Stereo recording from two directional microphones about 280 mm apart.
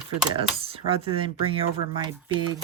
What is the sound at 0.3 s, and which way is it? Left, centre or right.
Speech, centre.